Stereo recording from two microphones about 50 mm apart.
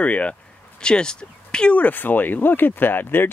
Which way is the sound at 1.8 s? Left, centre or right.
Left.